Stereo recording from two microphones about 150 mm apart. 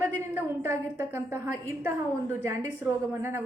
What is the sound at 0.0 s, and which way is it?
A woman's voice, 15° right (ahead or behind).